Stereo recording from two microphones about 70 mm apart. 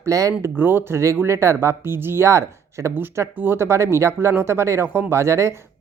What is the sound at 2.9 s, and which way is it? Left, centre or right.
Speech, right.